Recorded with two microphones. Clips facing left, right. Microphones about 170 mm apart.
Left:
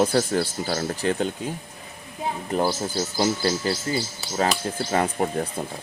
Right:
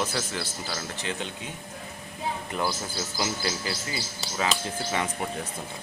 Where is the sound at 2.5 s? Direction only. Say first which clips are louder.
Left 10 dB; 40° left (ahead or behind).